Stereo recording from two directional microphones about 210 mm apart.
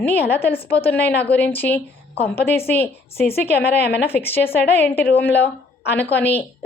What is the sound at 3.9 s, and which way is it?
Speech, 10° left (ahead or behind).